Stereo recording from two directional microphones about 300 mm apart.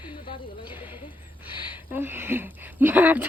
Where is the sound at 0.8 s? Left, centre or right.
Centre.